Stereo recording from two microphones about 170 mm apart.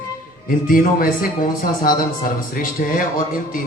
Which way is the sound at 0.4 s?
55° left (ahead or behind).